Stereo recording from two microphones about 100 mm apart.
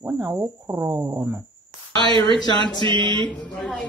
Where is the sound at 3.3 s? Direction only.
5° left (ahead or behind).